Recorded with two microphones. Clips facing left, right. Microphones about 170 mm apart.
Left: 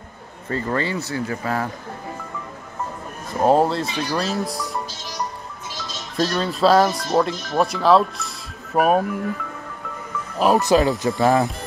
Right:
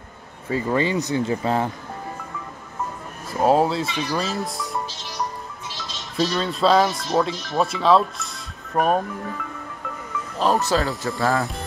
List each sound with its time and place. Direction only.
0.5 s speech: 10° right (ahead or behind)
3.3 s speech: centre (ahead or behind)
6.1 s speech: centre (ahead or behind)
10.4 s speech: 15° left (ahead or behind)